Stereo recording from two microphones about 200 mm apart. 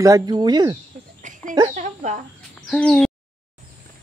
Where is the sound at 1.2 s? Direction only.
40° right (ahead or behind).